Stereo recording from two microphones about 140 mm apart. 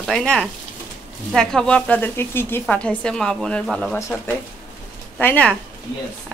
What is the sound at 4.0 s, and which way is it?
A woman's voice, 20° left (ahead or behind).